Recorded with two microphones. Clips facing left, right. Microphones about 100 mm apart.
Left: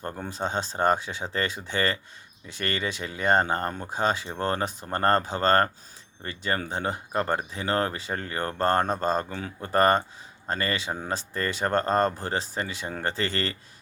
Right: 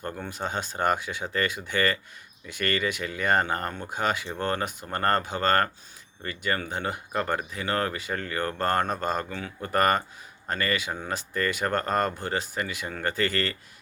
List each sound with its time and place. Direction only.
0.0 s speech: 30° left (ahead or behind)